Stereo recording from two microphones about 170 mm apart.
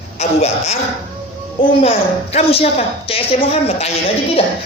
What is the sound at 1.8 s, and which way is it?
A woman's voice, 35° left (ahead or behind).